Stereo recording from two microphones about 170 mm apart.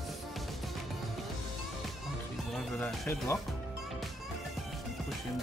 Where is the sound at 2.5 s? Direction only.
Centre (ahead or behind).